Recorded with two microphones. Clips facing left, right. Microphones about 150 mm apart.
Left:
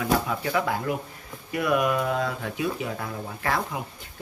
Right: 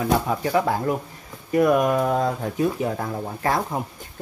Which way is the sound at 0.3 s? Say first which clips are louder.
Right 4 dB; 35° right (ahead or behind).